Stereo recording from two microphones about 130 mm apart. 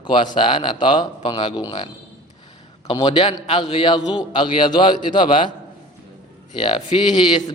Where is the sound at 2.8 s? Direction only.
40° left (ahead or behind).